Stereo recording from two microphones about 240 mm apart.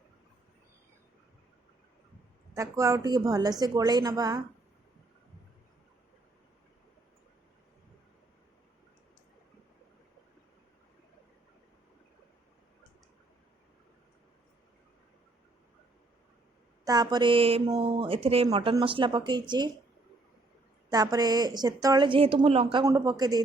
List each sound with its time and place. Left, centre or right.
2.6 s a woman's voice: centre
16.8 s a woman's voice: centre
20.9 s a woman's voice: centre